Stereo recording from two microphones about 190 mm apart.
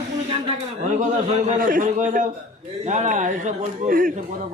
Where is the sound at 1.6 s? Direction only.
45° right (ahead or behind).